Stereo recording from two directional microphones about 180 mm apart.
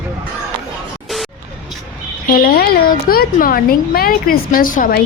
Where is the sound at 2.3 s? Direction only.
55° left (ahead or behind).